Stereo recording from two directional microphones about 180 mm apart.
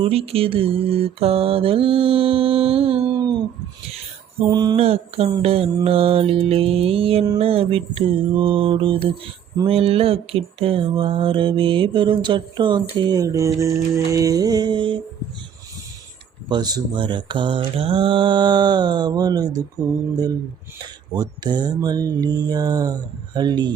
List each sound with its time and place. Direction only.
0.0 s mantra: 35° right (ahead or behind)
3.9 s a sound: 25° right (ahead or behind)
4.8 s mantra: 35° right (ahead or behind)
9.0 s speech: 30° right (ahead or behind)
16.5 s speech: 20° right (ahead or behind)
19.8 s mantra: centre (ahead or behind)
21.2 s speech: 25° right (ahead or behind)